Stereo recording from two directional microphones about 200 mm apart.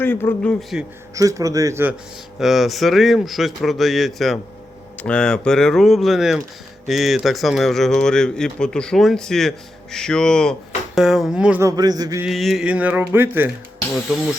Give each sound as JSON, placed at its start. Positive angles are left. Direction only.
{"t": 0.0, "sound": "speech", "side_deg": 10}
{"t": 0.7, "sound": "speech", "side_deg": -5}
{"t": 1.1, "sound": "a sound", "side_deg": -15}
{"t": 2.4, "sound": "speech", "side_deg": 0}
{"t": 11.8, "sound": "mantra", "side_deg": -20}
{"t": 12.2, "sound": "a sound", "side_deg": 0}